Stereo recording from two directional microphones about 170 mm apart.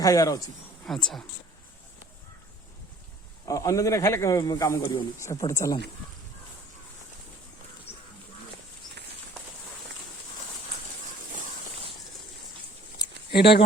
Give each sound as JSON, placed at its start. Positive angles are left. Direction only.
{"t": 0.0, "sound": "a man's voice", "side_deg": 20}
{"t": 0.9, "sound": "speech", "side_deg": 5}
{"t": 3.4, "sound": "a man's voice", "side_deg": 20}
{"t": 7.9, "sound": "a sound", "side_deg": 35}
{"t": 13.3, "sound": "speech", "side_deg": 75}